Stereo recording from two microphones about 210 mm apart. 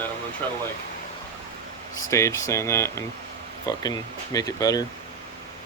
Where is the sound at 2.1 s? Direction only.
15° left (ahead or behind).